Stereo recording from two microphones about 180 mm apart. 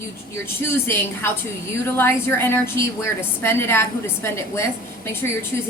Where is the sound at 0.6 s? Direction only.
15° left (ahead or behind).